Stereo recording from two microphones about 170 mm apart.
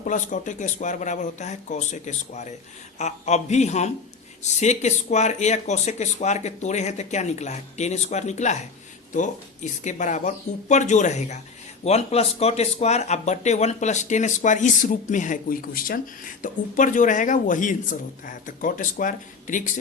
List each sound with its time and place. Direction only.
0.0 s speech: 50° left (ahead or behind)
9.8 s speech: 45° left (ahead or behind)